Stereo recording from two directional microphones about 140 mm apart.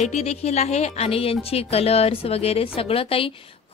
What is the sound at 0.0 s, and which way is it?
A woman's voice, 50° left (ahead or behind).